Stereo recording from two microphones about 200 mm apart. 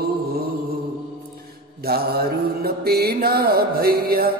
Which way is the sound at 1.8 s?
50° right (ahead or behind).